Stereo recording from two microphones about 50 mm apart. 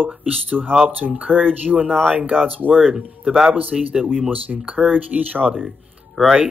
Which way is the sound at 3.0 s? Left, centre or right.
Centre.